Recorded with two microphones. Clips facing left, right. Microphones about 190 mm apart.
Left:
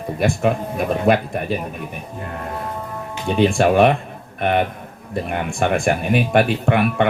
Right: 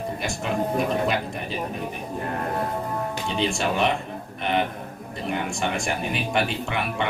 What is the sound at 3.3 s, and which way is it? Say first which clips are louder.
Speech: left 10 dB; 55° left (ahead or behind).